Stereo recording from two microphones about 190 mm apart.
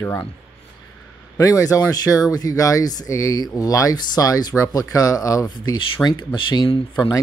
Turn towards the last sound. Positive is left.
turn(degrees=20)  # may be behind; listen again after turning